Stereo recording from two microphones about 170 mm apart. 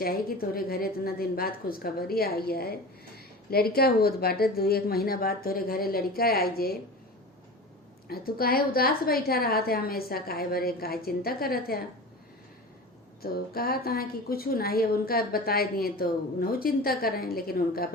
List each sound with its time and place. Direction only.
0.0 s a woman's voice: 60° left (ahead or behind)
8.0 s a woman's voice: 60° left (ahead or behind)
13.2 s a woman's voice: 65° left (ahead or behind)